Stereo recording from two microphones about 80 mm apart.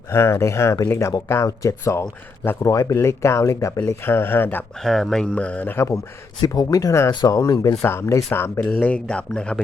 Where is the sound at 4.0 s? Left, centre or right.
Left.